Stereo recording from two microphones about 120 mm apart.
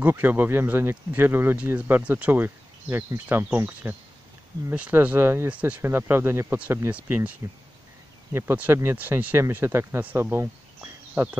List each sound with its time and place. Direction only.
0.0 s speech: 15° right (ahead or behind)